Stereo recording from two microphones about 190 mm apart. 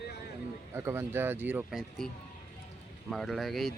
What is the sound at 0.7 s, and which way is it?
Speech, 15° right (ahead or behind).